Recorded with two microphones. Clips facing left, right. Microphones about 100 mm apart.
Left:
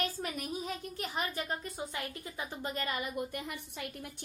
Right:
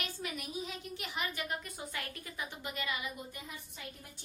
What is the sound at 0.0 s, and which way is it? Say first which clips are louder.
A woman's voice: left 5 dB; 40° left (ahead or behind).